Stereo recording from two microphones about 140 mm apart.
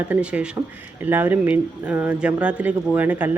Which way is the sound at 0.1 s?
10° right (ahead or behind).